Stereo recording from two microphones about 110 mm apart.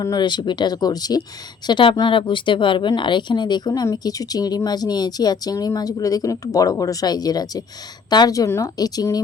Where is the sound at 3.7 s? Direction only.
30° left (ahead or behind).